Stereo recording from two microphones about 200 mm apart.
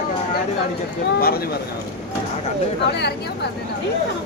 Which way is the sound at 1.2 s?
50° left (ahead or behind).